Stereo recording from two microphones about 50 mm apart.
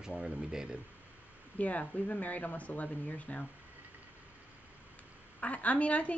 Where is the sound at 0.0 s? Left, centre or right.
Centre.